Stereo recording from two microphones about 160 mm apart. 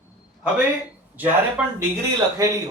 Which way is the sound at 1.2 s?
10° right (ahead or behind).